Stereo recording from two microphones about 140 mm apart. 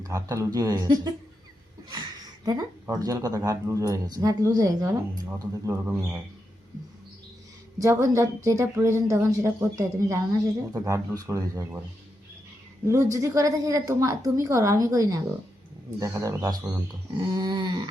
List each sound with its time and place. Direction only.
0.0 s speech: 20° right (ahead or behind)
1.9 s a sound: 30° right (ahead or behind)
2.9 s speech: 25° right (ahead or behind)
7.8 s speech: 20° right (ahead or behind)
12.9 s speech: 20° right (ahead or behind)